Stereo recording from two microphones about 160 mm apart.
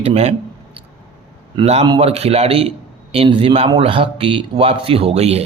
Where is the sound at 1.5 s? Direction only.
40° right (ahead or behind).